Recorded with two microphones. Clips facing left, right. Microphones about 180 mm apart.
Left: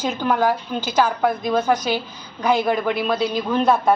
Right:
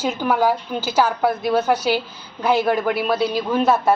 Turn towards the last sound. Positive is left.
turn(degrees=-5)  # may be behind; listen again after turning